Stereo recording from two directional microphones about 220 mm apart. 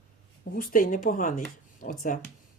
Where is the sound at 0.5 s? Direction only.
40° left (ahead or behind).